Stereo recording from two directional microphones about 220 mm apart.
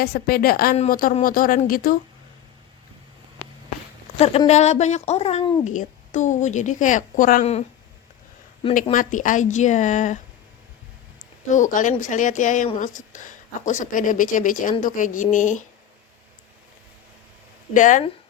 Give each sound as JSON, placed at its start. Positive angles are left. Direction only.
{"t": 0.0, "sound": "a woman's voice", "side_deg": 45}
{"t": 4.2, "sound": "speech", "side_deg": 25}
{"t": 8.7, "sound": "speech", "side_deg": 35}
{"t": 11.4, "sound": "speech", "side_deg": 35}
{"t": 17.7, "sound": "speech", "side_deg": 35}